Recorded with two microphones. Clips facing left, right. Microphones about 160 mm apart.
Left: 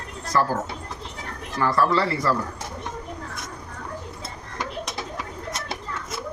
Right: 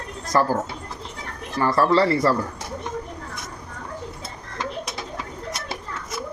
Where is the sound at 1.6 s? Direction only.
35° right (ahead or behind).